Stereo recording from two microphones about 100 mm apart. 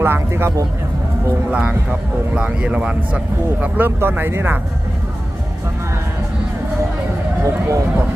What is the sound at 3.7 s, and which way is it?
Speech, 20° right (ahead or behind).